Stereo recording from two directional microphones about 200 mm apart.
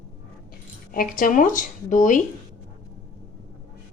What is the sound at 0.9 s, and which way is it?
Speech, 45° left (ahead or behind).